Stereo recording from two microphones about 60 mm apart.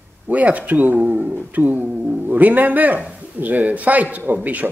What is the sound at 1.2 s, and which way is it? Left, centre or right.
Speech, centre.